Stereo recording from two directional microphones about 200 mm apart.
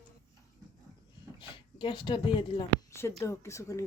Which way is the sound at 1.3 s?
25° left (ahead or behind).